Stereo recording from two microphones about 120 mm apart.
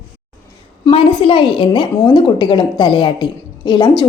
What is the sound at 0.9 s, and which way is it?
A woman's voice, 45° left (ahead or behind).